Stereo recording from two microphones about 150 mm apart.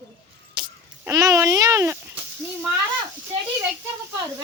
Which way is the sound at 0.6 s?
30° right (ahead or behind).